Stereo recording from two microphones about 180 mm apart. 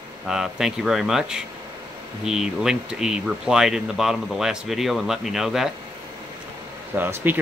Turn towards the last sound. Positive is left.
turn(degrees=-10)  # may be behind; listen again after turning